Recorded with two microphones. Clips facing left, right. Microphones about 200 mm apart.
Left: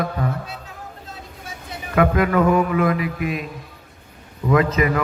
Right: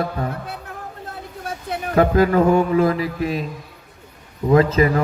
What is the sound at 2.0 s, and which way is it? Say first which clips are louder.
A man's voice: right 2 dB; 30° right (ahead or behind).